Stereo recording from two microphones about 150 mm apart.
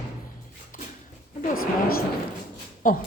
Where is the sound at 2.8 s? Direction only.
65° left (ahead or behind).